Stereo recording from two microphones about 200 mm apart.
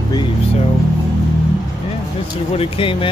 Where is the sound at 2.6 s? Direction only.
25° left (ahead or behind).